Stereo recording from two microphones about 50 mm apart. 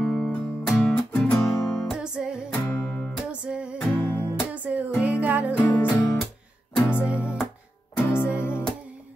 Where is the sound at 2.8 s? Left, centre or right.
Left.